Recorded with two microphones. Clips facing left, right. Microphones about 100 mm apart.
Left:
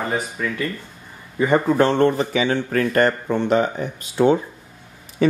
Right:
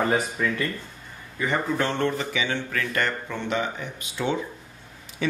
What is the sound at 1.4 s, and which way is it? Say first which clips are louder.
Speech: left 8 dB; 45° left (ahead or behind).